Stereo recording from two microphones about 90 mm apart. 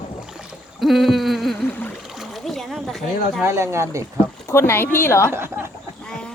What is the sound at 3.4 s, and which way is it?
Speech, 30° right (ahead or behind).